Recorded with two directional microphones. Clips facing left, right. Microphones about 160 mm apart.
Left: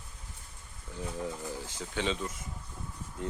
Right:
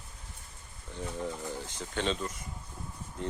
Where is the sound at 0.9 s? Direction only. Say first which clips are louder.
Even; 5° left (ahead or behind).